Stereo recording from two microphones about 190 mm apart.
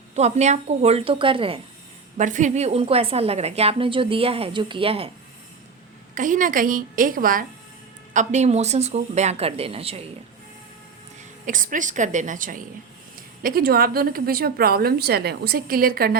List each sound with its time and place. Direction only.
0.2 s a woman's voice: 35° right (ahead or behind)
2.1 s a woman's voice: 40° right (ahead or behind)
6.1 s a woman's voice: 45° right (ahead or behind)
11.4 s a woman's voice: 45° right (ahead or behind)